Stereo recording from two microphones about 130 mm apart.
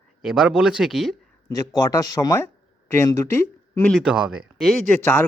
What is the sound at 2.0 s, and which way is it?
Speech, 30° left (ahead or behind).